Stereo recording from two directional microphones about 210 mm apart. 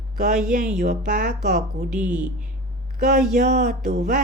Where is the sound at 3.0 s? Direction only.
35° right (ahead or behind).